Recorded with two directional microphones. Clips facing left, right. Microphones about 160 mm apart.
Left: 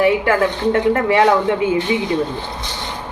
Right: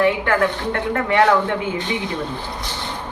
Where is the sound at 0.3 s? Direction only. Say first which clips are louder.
Left 4 dB; 25° left (ahead or behind).